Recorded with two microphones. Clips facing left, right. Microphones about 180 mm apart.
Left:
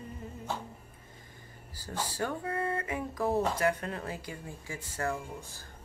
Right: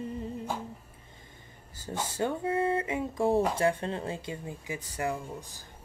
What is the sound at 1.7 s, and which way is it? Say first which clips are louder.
Speech: right 2 dB; 20° right (ahead or behind).